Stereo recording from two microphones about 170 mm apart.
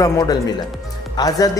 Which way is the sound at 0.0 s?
20° left (ahead or behind).